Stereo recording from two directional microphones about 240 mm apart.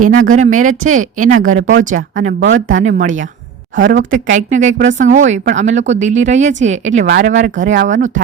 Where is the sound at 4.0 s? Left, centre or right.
Right.